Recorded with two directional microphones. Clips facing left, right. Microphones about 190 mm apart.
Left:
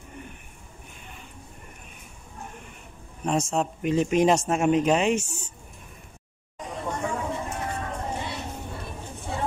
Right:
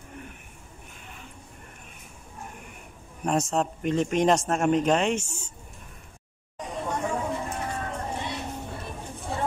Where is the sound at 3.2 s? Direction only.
Centre (ahead or behind).